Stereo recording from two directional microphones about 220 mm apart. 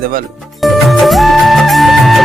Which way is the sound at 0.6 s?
Centre (ahead or behind).